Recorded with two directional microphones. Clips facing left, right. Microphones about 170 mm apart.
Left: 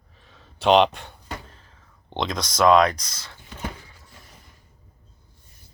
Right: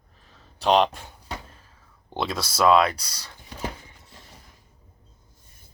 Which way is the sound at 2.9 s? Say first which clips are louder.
Left 1 dB; 35° right (ahead or behind).